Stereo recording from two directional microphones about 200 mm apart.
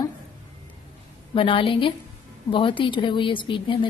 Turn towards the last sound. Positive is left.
turn(degrees=25)  # may be behind; listen again after turning